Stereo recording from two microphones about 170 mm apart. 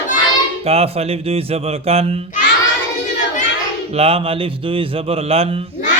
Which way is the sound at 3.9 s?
35° right (ahead or behind).